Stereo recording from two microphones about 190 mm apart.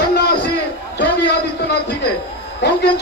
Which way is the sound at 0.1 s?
60° left (ahead or behind).